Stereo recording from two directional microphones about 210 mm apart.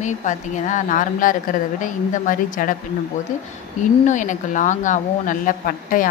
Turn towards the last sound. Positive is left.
turn(degrees=40)  # may be behind; listen again after turning